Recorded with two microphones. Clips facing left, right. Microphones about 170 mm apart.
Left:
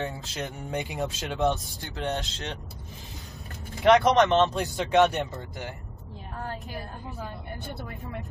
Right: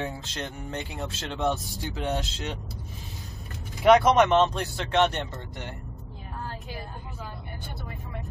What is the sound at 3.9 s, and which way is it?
Speech, 5° right (ahead or behind).